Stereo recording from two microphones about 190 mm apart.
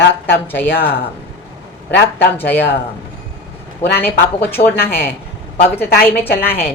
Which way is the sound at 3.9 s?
10° left (ahead or behind).